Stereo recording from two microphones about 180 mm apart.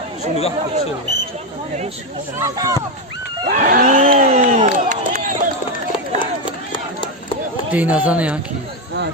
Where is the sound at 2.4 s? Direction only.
20° right (ahead or behind).